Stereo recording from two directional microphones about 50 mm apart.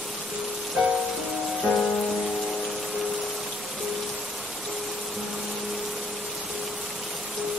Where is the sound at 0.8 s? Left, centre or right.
Right.